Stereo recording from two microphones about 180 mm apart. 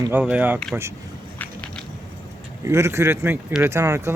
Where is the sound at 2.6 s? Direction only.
15° right (ahead or behind).